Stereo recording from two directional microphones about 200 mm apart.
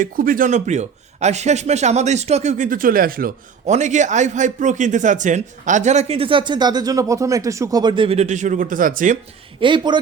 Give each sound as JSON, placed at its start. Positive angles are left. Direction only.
{"t": 0.0, "sound": "speech", "side_deg": -45}
{"t": 9.6, "sound": "speech", "side_deg": -25}